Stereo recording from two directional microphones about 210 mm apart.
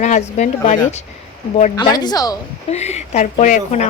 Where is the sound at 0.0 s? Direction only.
35° left (ahead or behind).